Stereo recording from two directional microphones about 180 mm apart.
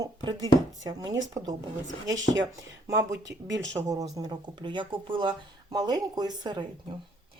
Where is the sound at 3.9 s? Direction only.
20° right (ahead or behind).